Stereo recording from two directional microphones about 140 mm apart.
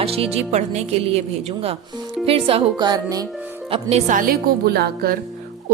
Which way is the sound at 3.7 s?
50° right (ahead or behind).